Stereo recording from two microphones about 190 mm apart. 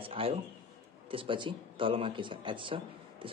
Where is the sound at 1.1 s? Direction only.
25° right (ahead or behind).